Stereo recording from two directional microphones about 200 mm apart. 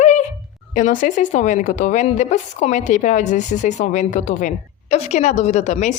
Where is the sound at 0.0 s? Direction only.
35° left (ahead or behind).